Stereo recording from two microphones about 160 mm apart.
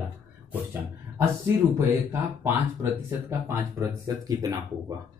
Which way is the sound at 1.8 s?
15° right (ahead or behind).